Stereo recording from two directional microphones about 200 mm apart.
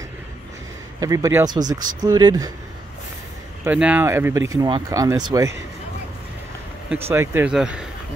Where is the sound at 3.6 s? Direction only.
5° right (ahead or behind).